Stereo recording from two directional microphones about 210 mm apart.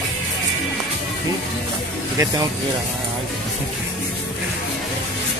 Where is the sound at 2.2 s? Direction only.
15° right (ahead or behind).